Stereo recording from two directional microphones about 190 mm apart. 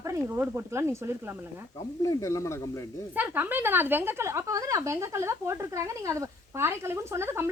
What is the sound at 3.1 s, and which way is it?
Speech, 10° right (ahead or behind).